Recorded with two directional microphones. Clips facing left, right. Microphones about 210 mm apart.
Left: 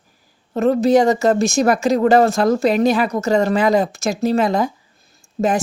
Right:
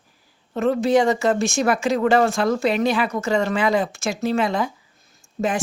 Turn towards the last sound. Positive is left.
turn(degrees=40)  # may be behind; listen again after turning